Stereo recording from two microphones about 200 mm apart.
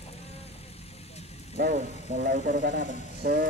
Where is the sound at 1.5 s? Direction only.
45° right (ahead or behind).